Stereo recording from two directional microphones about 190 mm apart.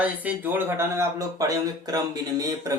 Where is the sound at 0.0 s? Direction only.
10° right (ahead or behind).